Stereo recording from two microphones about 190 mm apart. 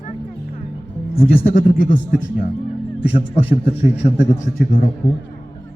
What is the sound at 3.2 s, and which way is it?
A man's voice, 35° left (ahead or behind).